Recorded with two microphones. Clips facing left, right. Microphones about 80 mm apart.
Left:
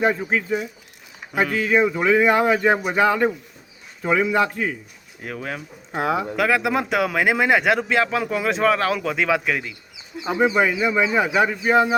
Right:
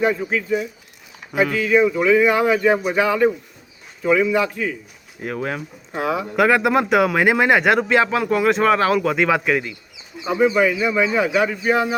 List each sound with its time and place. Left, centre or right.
0.0 s speech: left
5.2 s speech: centre
6.0 s speech: left
6.3 s speech: centre
10.4 s speech: left